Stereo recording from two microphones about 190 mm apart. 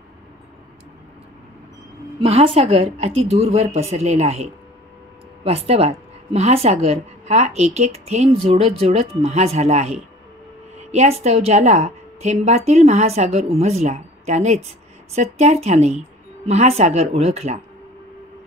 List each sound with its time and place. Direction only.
2.2 s a woman's voice: 30° right (ahead or behind)